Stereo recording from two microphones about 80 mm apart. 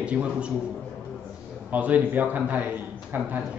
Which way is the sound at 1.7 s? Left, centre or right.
Centre.